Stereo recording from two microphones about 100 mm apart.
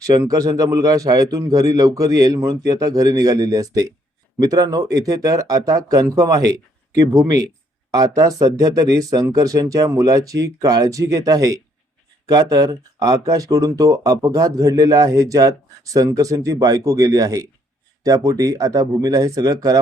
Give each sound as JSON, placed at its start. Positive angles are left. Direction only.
{"t": 0.0, "sound": "speech", "side_deg": -35}